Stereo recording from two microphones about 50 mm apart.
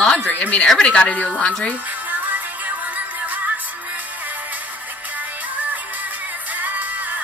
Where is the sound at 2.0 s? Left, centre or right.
Right.